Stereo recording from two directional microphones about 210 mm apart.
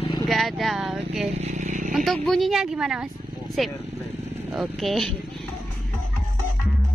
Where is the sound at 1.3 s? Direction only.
35° right (ahead or behind).